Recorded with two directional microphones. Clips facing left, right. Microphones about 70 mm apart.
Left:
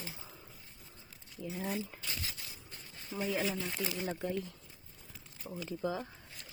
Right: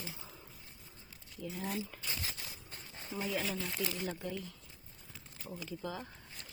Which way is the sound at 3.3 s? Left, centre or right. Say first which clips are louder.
Left 3 dB; centre.